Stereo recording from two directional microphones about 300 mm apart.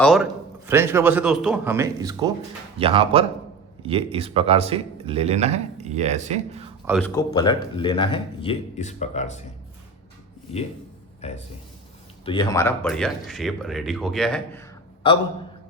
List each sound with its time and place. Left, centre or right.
0.0 s speech: centre; by 6.7 s right
6.8 s a man's voice: centre; by 9.4 s left
11.2 s a man's voice: left; by 14.6 s centre